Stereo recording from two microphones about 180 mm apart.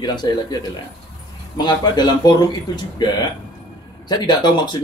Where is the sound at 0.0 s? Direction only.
25° left (ahead or behind).